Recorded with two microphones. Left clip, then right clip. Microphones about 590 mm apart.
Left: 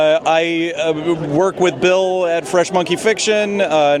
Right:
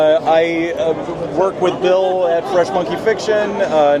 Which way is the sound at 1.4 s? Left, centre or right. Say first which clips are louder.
Right 1 dB; left.